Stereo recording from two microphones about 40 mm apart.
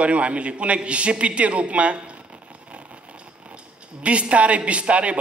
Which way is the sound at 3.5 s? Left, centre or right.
Right.